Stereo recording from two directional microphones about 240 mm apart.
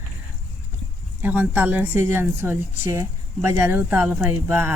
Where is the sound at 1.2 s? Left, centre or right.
Centre.